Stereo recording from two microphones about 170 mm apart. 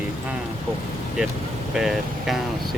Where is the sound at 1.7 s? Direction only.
Centre (ahead or behind).